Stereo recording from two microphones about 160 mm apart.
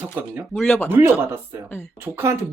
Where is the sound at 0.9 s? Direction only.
15° right (ahead or behind).